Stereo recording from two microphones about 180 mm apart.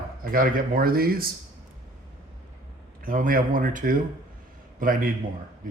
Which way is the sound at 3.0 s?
50° right (ahead or behind).